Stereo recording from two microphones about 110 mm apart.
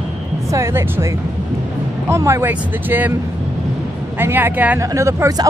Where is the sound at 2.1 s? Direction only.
25° right (ahead or behind).